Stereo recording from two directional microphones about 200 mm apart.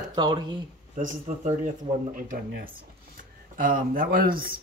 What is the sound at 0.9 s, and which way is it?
Speech, 40° right (ahead or behind).